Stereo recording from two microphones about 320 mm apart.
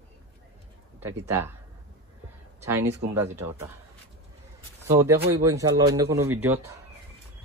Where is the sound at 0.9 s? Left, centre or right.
Centre.